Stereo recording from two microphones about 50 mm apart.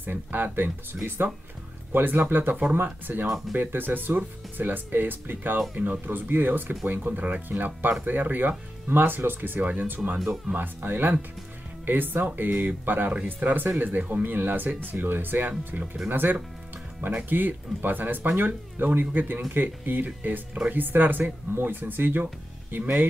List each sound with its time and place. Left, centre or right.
0.0 s speech: right
3.3 s speech: centre
3.5 s speech: right
10.1 s speech: centre
10.5 s speech: right
13.1 s speech: right
13.5 s speech: right